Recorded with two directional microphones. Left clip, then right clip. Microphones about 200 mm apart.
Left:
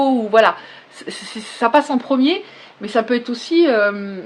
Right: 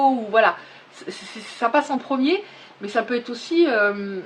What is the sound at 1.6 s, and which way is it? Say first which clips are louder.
Speech: left 5 dB; 45° left (ahead or behind).